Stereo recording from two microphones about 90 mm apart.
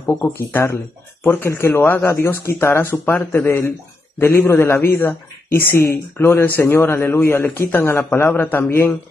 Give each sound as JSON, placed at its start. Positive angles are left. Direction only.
{"t": 0.5, "sound": "a man's voice", "side_deg": 25}